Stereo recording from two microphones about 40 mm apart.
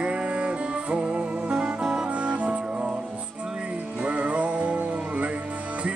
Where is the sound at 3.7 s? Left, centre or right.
Right.